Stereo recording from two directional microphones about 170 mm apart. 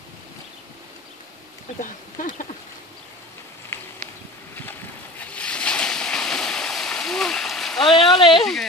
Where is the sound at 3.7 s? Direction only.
15° left (ahead or behind).